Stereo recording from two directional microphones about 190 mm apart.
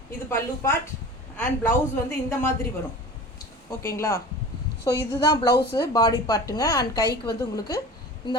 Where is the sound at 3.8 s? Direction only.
15° left (ahead or behind).